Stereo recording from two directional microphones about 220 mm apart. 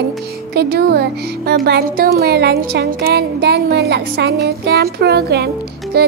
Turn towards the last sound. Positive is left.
turn(degrees=-45)  # may be behind; listen again after turning